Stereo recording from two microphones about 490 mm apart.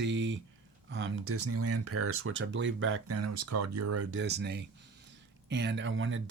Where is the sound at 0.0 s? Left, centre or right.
Right.